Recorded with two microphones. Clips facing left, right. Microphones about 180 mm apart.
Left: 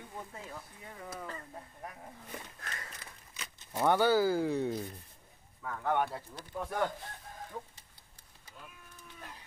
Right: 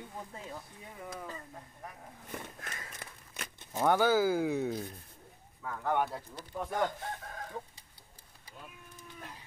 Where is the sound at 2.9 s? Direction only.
55° right (ahead or behind).